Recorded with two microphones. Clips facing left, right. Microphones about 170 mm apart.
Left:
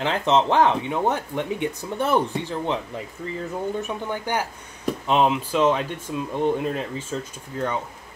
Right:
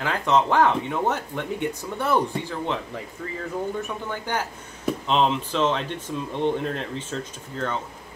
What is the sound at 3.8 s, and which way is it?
Speech, 15° left (ahead or behind).